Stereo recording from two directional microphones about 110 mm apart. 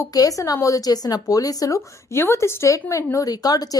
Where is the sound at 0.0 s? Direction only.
35° left (ahead or behind).